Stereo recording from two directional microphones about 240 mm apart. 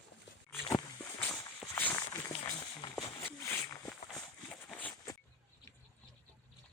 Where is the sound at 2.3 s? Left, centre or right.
Left.